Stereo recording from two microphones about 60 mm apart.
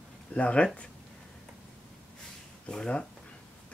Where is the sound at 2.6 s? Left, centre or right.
Centre.